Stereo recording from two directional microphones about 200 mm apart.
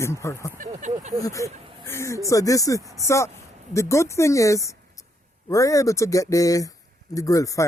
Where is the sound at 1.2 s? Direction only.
15° left (ahead or behind).